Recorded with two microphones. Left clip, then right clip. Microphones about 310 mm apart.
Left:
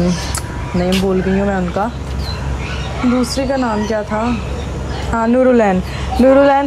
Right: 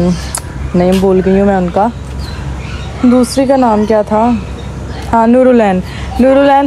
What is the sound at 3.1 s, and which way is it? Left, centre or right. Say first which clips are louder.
Speech: right 9 dB; centre.